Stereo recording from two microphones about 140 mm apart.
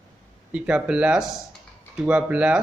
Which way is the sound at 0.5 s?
10° right (ahead or behind).